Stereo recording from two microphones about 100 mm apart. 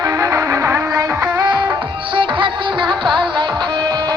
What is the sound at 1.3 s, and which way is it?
Music, 50° right (ahead or behind).